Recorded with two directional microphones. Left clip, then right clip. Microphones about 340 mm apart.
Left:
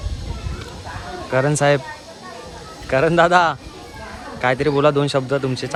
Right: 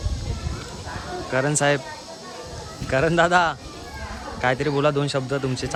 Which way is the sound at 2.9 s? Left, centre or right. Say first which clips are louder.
Left 4 dB; centre.